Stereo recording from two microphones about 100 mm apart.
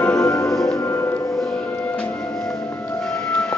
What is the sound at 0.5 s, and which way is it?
Music, 5° left (ahead or behind).